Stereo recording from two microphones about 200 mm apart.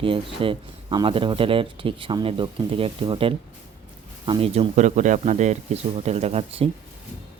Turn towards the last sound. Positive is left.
turn(degrees=-30)  # may be behind; listen again after turning